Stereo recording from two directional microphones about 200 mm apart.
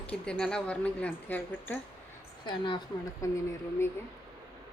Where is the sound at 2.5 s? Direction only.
25° left (ahead or behind).